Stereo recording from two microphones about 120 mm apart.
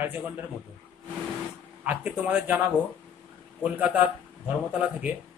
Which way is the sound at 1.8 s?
10° right (ahead or behind).